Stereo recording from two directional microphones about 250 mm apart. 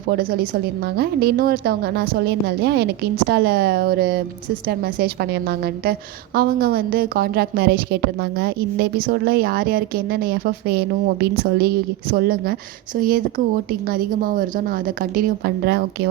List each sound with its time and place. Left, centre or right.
0.2 s speech: right
5.5 s speech: right